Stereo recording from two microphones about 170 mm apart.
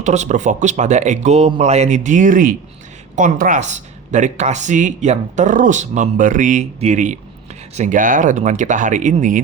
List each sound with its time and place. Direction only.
0.0 s speech: 45° right (ahead or behind)